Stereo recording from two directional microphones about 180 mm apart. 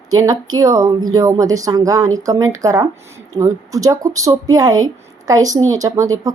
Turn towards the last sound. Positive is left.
turn(degrees=-20)  # may be behind; listen again after turning